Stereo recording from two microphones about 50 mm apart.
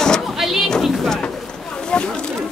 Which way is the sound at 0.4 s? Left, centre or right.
Centre.